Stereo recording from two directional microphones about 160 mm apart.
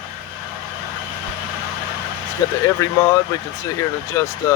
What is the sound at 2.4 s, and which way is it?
Speech, 20° left (ahead or behind).